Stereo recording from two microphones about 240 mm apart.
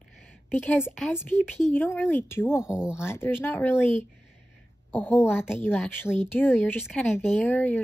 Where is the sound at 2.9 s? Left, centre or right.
Centre.